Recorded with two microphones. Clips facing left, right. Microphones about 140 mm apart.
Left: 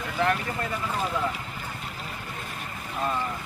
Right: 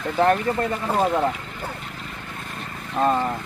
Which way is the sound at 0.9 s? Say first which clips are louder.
Right 10 dB; 50° right (ahead or behind).